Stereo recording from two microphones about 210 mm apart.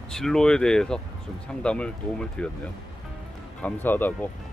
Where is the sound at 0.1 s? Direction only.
Centre (ahead or behind).